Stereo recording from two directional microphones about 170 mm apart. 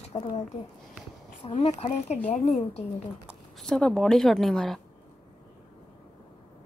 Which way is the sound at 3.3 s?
Centre (ahead or behind).